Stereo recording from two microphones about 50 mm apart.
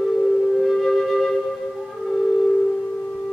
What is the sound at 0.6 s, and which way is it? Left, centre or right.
Flute, centre.